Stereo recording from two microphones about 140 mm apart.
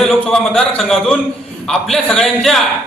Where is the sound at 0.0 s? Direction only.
5° left (ahead or behind).